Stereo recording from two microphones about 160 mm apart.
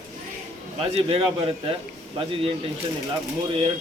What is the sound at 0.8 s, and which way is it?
A man's voice, 35° right (ahead or behind).